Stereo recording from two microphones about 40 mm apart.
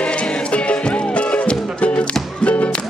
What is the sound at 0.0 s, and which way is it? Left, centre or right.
Music, left.